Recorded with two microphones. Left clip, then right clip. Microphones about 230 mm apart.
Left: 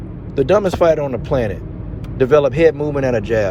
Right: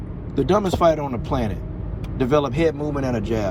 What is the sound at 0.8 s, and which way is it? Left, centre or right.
Speech, left.